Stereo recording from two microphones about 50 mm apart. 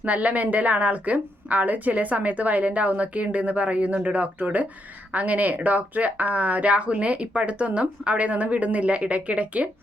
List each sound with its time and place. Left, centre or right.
0.0 s speech: right